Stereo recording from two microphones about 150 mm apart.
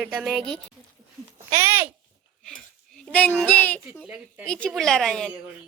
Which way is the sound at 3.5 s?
10° left (ahead or behind).